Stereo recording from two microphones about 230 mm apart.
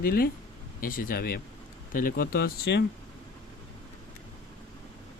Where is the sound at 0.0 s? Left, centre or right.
Left.